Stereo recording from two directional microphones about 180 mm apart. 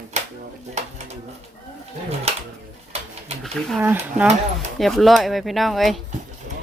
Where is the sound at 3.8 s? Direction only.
10° right (ahead or behind).